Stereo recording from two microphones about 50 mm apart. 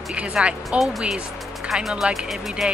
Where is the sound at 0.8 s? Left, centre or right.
Centre.